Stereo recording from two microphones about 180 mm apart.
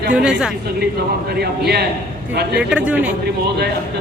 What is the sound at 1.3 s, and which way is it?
Speech, 60° right (ahead or behind).